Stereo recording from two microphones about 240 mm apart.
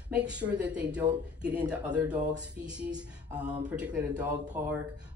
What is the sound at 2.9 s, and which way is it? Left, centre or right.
Music, centre.